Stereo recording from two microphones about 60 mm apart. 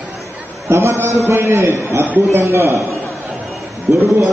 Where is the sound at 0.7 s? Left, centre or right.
Right.